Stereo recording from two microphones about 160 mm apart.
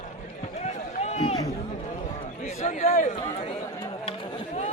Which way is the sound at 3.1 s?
35° left (ahead or behind).